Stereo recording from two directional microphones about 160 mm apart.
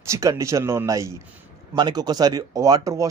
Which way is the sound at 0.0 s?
20° right (ahead or behind).